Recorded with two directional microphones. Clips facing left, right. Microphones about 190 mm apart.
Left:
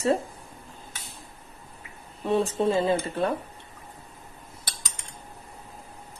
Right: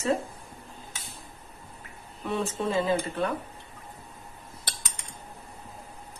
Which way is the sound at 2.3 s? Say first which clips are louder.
Left 5 dB; 35° left (ahead or behind).